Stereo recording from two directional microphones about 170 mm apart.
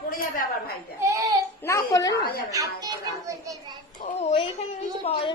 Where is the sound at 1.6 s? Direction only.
20° left (ahead or behind).